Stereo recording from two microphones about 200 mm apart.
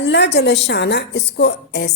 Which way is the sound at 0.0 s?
60° left (ahead or behind).